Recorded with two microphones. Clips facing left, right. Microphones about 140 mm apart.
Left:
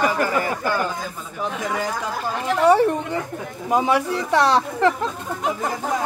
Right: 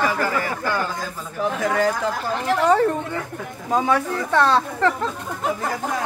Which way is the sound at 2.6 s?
15° left (ahead or behind).